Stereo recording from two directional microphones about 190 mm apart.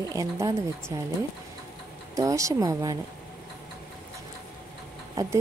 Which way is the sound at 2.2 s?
15° right (ahead or behind).